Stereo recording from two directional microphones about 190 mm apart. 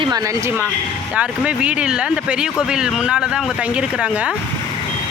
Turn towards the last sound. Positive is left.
turn(degrees=-5)  # may be behind; listen again after turning